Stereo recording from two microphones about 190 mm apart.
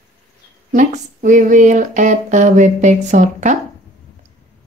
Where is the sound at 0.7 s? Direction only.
40° right (ahead or behind).